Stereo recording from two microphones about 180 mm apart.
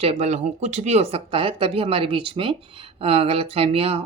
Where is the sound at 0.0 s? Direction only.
35° right (ahead or behind).